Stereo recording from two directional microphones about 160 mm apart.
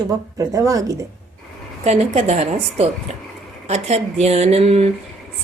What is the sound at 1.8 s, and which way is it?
Speech, 45° right (ahead or behind).